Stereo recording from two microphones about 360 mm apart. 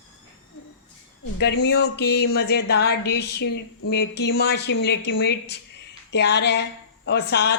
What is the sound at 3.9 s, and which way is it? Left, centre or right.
Speech, left.